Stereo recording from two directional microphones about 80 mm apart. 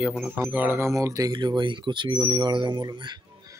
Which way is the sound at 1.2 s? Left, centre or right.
Right.